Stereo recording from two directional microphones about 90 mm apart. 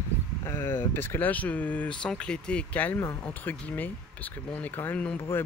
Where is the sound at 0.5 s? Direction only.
30° left (ahead or behind).